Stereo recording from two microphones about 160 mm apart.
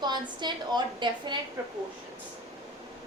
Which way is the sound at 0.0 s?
30° right (ahead or behind).